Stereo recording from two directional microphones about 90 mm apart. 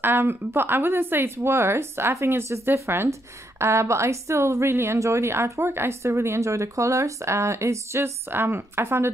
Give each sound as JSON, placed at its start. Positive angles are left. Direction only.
{"t": 0.0, "sound": "speech", "side_deg": -25}